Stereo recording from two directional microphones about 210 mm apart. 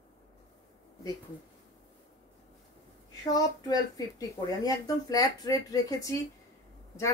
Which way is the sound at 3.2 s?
20° left (ahead or behind).